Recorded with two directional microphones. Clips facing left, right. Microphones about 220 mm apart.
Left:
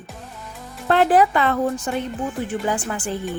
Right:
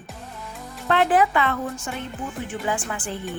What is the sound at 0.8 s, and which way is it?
Speech, 35° left (ahead or behind).